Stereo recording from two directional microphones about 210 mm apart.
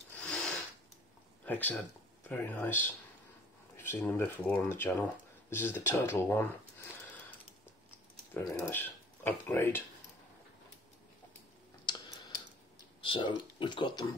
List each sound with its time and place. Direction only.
0.1 s a sound: centre (ahead or behind)
1.4 s speech: 10° left (ahead or behind)
8.6 s speech: 10° left (ahead or behind)
13.0 s speech: 25° left (ahead or behind)